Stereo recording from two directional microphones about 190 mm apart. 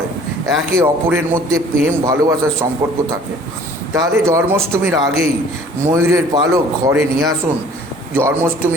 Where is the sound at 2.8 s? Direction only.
15° right (ahead or behind).